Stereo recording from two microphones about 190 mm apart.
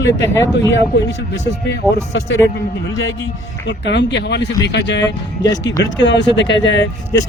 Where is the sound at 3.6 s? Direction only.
65° left (ahead or behind).